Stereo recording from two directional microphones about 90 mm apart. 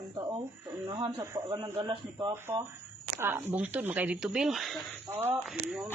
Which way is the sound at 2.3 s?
25° right (ahead or behind).